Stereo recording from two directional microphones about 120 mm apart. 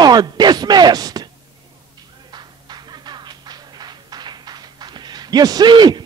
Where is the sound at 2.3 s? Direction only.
35° right (ahead or behind).